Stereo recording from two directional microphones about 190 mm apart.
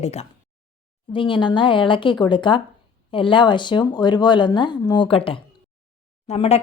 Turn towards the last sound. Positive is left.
turn(degrees=35)  # may be behind; listen again after turning